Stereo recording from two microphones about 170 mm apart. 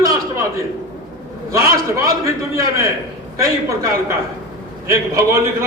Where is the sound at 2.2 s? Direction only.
20° right (ahead or behind).